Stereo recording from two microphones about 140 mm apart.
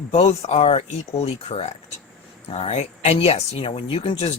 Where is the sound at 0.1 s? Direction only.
50° left (ahead or behind).